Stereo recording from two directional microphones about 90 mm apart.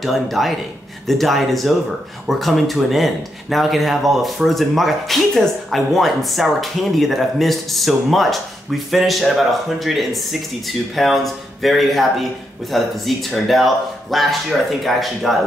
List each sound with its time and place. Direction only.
0.0 s speech: centre (ahead or behind)